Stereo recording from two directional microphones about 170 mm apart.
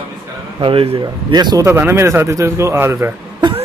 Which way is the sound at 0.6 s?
35° right (ahead or behind).